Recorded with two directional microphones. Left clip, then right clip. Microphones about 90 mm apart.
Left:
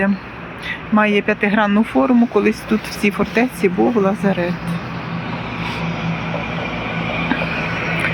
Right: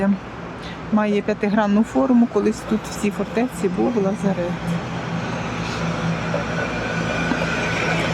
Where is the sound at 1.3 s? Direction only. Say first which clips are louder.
Left 4 dB; 20° right (ahead or behind).